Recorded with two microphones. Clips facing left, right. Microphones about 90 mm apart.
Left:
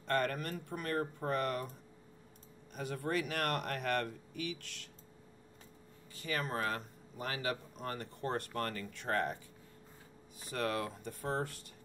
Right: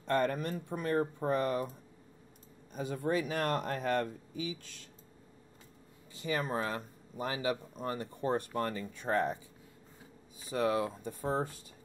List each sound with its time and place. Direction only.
0.0 s speech: 15° right (ahead or behind)
3.0 s speech: 15° right (ahead or behind)
4.3 s speech: 65° left (ahead or behind)
6.2 s speech: 20° right (ahead or behind)
10.5 s speech: 15° right (ahead or behind)